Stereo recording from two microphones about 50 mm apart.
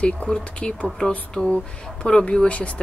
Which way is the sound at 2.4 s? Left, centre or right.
Left.